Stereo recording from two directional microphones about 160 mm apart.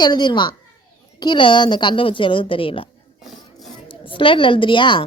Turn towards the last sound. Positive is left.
turn(degrees=30)  # may be behind; listen again after turning